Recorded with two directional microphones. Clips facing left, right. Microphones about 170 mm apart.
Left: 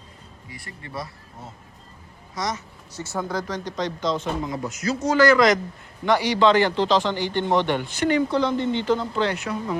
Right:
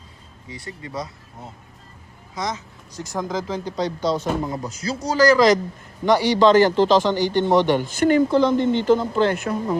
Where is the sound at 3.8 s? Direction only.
35° right (ahead or behind).